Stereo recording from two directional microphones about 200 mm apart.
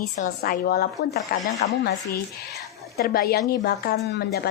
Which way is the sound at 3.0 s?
50° left (ahead or behind).